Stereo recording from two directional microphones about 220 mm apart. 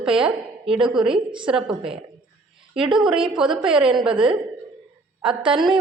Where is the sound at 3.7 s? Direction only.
20° right (ahead or behind).